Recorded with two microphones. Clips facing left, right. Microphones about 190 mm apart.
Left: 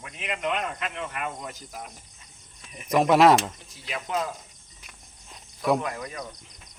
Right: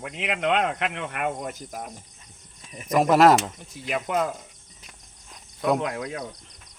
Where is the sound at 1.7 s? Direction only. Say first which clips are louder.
Right 4 dB; 45° right (ahead or behind).